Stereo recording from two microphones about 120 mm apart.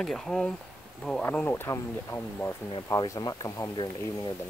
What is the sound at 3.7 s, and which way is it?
Speech, 35° left (ahead or behind).